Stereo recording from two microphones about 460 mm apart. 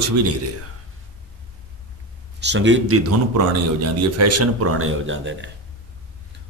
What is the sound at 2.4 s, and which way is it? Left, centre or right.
Speech, right.